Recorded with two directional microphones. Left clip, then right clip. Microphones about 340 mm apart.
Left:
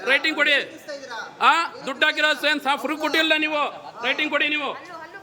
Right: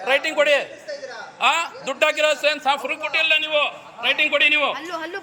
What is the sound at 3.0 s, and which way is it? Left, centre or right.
Speech, left.